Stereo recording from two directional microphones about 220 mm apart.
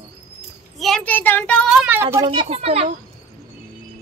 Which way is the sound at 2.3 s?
25° right (ahead or behind).